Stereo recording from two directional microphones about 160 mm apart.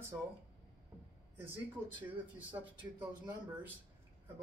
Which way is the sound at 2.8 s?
25° right (ahead or behind).